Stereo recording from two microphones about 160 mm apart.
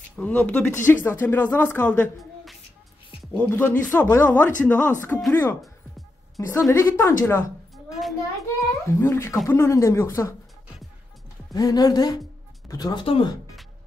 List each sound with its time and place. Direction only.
0.1 s speech: 10° left (ahead or behind)
3.3 s speech: 10° left (ahead or behind)
5.6 s music: centre (ahead or behind)
6.7 s speech: 15° left (ahead or behind)
7.7 s a sound: centre (ahead or behind)
8.6 s speech: 15° left (ahead or behind)
11.5 s speech: 25° left (ahead or behind)